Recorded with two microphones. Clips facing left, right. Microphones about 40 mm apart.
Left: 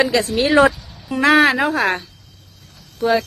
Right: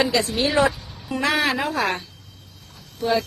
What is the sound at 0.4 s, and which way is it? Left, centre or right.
Speech, left.